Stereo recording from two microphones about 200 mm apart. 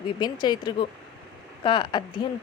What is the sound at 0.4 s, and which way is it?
Speech, 20° left (ahead or behind).